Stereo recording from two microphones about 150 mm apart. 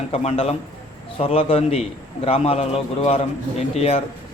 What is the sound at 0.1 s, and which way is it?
A man's voice, 40° left (ahead or behind).